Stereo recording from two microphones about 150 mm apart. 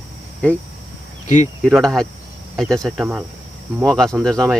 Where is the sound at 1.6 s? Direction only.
Centre (ahead or behind).